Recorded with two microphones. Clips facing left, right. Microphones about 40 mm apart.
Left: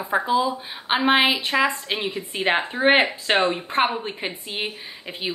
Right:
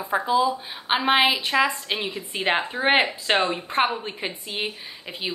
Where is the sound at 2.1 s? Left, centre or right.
Centre.